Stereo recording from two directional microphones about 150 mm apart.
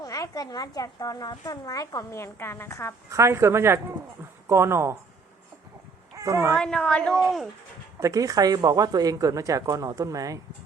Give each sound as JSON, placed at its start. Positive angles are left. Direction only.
{"t": 0.0, "sound": "speech", "side_deg": 25}
{"t": 3.1, "sound": "a woman's voice", "side_deg": -20}
{"t": 6.1, "sound": "speech", "side_deg": -20}
{"t": 6.6, "sound": "a woman's voice", "side_deg": 5}
{"t": 7.9, "sound": "a woman's voice", "side_deg": -20}